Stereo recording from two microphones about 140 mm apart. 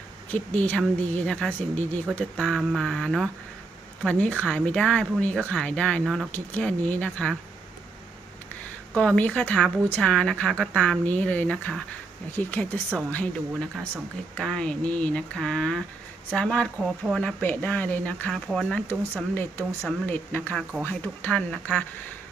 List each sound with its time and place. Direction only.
0.3 s speech: 10° left (ahead or behind)
2.6 s mantra: centre (ahead or behind)
4.0 s speech: 10° left (ahead or behind)
9.0 s speech: 10° left (ahead or behind)